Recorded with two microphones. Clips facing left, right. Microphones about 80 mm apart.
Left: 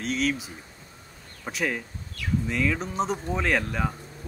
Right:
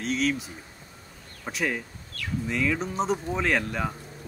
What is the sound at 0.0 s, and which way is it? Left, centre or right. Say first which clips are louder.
Speech: even; centre.